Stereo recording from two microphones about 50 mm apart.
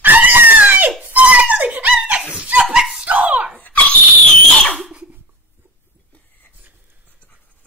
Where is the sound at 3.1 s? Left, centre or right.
Right.